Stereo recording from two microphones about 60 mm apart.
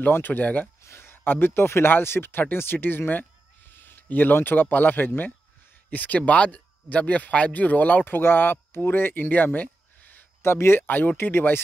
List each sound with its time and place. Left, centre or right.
0.1 s speech: left
0.8 s speech: left
10.4 s speech: left
10.9 s speech: left